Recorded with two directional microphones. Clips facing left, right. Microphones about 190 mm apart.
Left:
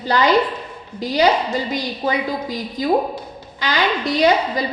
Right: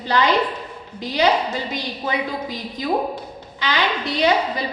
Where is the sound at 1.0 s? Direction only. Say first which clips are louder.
Left 2 dB; 35° left (ahead or behind).